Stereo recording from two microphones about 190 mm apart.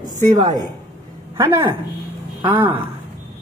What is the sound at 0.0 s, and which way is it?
A woman's voice, 20° right (ahead or behind).